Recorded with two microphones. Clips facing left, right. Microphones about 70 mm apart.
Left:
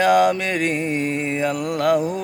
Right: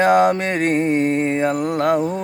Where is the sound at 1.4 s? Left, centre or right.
Right.